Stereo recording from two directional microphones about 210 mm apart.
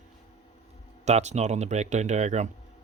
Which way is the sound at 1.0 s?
30° right (ahead or behind).